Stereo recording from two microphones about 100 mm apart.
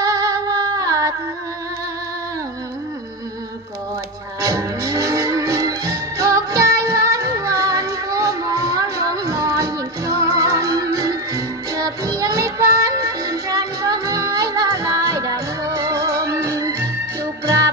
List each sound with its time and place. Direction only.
0.0 s music: 35° right (ahead or behind)
4.4 s music: 35° right (ahead or behind)